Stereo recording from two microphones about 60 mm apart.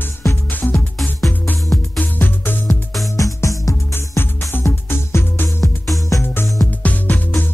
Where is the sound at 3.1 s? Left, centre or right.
Left.